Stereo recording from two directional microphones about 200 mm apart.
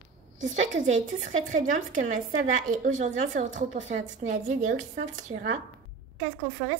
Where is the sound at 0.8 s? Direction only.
40° right (ahead or behind).